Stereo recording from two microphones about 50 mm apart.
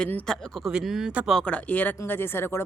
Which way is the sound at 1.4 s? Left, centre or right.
Left.